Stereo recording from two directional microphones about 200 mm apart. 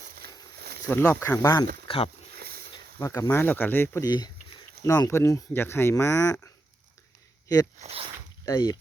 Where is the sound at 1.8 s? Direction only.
25° left (ahead or behind).